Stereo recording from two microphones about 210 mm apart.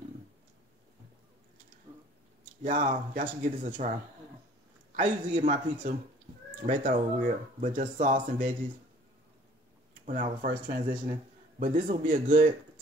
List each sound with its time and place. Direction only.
2.6 s speech: 40° right (ahead or behind)
4.9 s speech: 35° right (ahead or behind)
10.4 s speech: 40° right (ahead or behind)